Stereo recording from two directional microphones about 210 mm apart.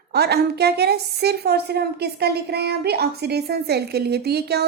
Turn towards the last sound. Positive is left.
turn(degrees=-50)  # may be behind; listen again after turning